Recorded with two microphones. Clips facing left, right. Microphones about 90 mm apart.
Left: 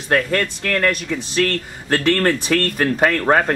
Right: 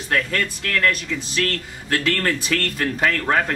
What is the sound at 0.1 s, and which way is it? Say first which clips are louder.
Speech: left 4 dB; 40° left (ahead or behind).